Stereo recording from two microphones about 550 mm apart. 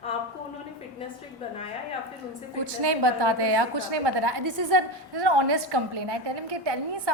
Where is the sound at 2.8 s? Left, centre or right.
Right.